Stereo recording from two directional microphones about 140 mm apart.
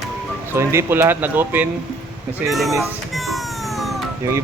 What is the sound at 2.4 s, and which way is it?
Speech, centre (ahead or behind).